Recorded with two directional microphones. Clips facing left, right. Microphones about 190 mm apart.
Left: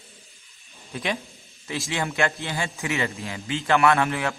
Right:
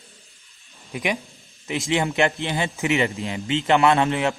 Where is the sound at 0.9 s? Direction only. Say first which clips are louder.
Right 3 dB; 15° right (ahead or behind).